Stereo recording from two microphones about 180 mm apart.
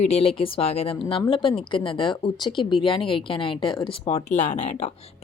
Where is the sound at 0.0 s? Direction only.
35° left (ahead or behind).